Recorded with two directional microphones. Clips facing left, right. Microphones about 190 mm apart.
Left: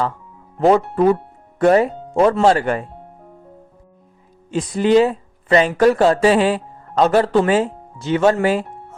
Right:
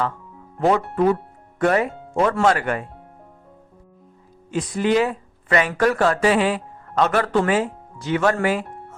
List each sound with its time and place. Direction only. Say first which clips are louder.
0.6 s speech: left 4 dB; 35° left (ahead or behind)
4.5 s speech: left 5 dB; 30° left (ahead or behind)